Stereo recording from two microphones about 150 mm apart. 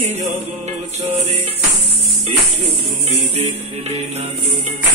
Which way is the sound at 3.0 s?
45° right (ahead or behind).